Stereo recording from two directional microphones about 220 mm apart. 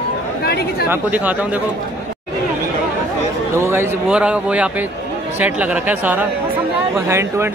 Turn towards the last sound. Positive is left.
turn(degrees=-10)  # may be behind; listen again after turning